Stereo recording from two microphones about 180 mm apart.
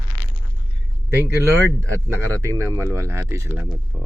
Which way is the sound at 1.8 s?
5° left (ahead or behind).